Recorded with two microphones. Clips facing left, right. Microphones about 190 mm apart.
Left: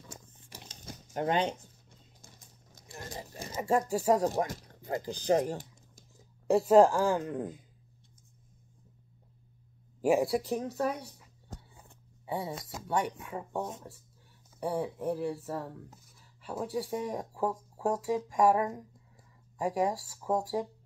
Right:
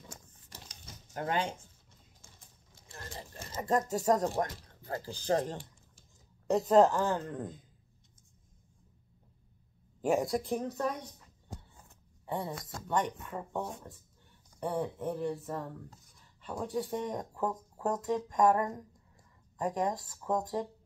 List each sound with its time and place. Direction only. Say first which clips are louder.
0.7 s a sound: left 6 dB; 20° left (ahead or behind)
2.2 s a sound: left 4 dB; 40° left (ahead or behind)
2.9 s speech: left 3 dB; 15° left (ahead or behind)
4.4 s speech: left 2 dB; 15° left (ahead or behind)
10.0 s speech: left 3 dB; 5° left (ahead or behind)
12.3 s speech: left 1 dB; 5° left (ahead or behind)